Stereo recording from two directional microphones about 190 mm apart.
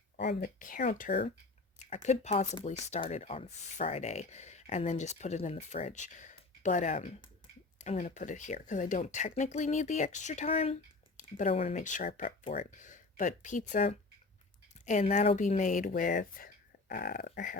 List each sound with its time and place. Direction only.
0.2 s speech: 55° left (ahead or behind)